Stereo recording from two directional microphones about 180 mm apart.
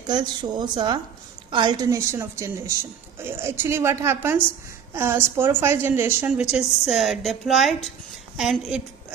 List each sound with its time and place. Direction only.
0.0 s a woman's voice: 25° right (ahead or behind); by 8.8 s 5° right (ahead or behind)